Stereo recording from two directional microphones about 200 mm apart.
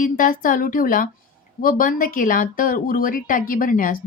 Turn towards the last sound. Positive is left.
turn(degrees=45)  # may be behind; listen again after turning